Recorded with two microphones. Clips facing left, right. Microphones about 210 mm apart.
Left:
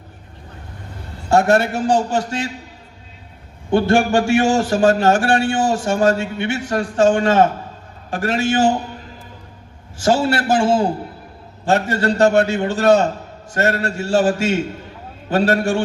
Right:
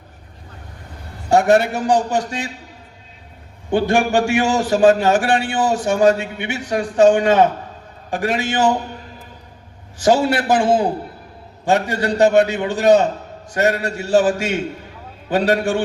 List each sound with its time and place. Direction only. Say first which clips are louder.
1.3 s a man's voice: right 1 dB; 15° right (ahead or behind)
3.8 s a man's voice: left 1 dB; 15° right (ahead or behind)
10.0 s a man's voice: right 1 dB; 15° right (ahead or behind)